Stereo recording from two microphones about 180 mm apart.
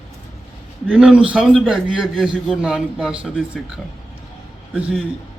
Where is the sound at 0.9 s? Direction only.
5° right (ahead or behind).